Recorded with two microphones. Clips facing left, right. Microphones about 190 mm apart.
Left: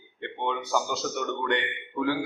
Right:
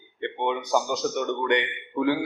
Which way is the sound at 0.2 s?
15° right (ahead or behind).